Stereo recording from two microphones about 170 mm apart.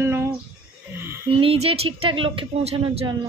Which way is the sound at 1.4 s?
35° right (ahead or behind).